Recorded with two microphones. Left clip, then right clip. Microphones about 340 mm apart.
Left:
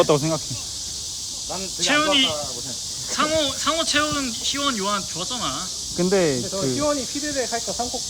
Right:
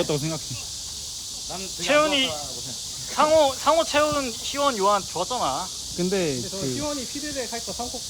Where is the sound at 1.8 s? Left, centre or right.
Centre.